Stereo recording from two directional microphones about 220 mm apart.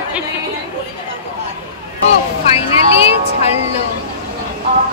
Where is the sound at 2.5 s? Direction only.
25° left (ahead or behind).